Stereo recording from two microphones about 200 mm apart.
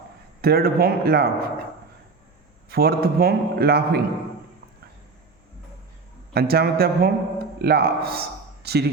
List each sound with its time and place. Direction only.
0.4 s a man's voice: 50° right (ahead or behind)
2.6 s a man's voice: 50° right (ahead or behind)
6.3 s a man's voice: 50° right (ahead or behind)